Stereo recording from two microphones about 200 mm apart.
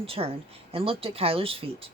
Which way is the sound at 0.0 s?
30° right (ahead or behind).